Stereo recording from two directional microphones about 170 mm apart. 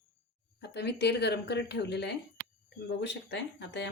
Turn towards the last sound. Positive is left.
turn(degrees=90)